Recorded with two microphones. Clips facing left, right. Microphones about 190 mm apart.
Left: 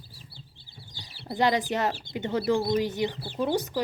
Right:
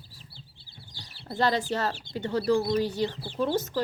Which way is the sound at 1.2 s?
15° left (ahead or behind).